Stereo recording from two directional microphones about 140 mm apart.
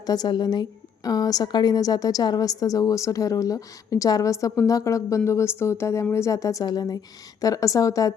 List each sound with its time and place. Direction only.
0.0 s a woman's voice: 30° left (ahead or behind)